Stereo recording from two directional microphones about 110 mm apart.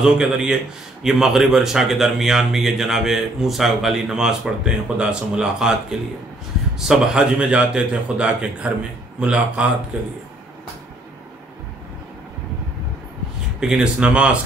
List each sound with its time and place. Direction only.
0.0 s a man's voice: 5° right (ahead or behind)
13.6 s a man's voice: 5° right (ahead or behind)